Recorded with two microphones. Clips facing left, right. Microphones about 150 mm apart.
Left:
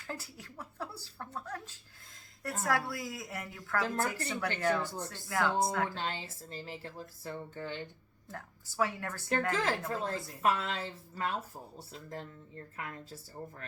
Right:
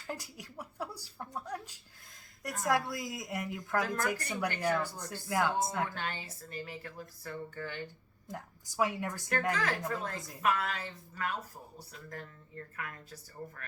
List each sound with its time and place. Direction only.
0.1 s a woman's voice: 15° right (ahead or behind)
3.8 s speech: 30° left (ahead or behind)
4.3 s a woman's voice: 15° right (ahead or behind)
4.8 s speech: 25° left (ahead or behind)
5.0 s a woman's voice: 20° right (ahead or behind)
5.8 s speech: 25° left (ahead or behind)
8.3 s a woman's voice: 15° right (ahead or behind)
9.5 s speech: 25° left (ahead or behind)